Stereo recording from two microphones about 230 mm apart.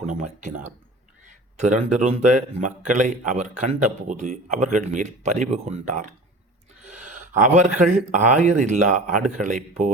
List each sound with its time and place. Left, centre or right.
0.0 s speech: right